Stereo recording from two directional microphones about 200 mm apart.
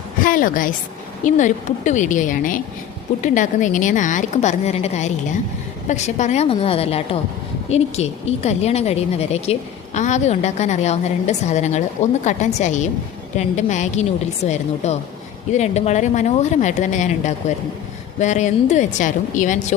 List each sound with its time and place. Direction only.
0.2 s a woman's voice: 45° left (ahead or behind)